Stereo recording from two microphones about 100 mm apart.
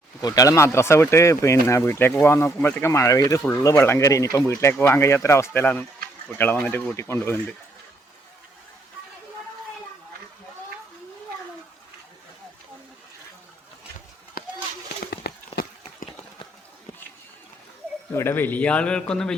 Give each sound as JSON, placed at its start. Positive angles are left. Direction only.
{"t": 0.2, "sound": "speech", "side_deg": 40}
{"t": 2.8, "sound": "speech", "side_deg": 30}
{"t": 18.1, "sound": "a man's voice", "side_deg": 25}